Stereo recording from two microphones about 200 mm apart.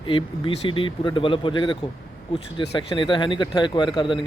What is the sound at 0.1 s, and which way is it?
Speech, 25° left (ahead or behind).